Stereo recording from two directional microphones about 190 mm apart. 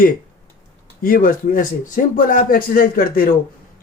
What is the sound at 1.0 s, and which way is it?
Speech, 45° left (ahead or behind).